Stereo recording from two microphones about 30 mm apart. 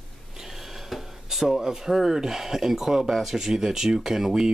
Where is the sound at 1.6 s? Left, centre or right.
Centre.